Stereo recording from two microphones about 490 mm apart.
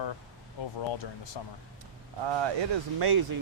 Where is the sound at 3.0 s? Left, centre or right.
Right.